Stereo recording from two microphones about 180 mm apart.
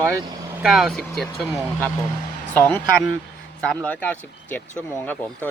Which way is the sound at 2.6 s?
10° left (ahead or behind).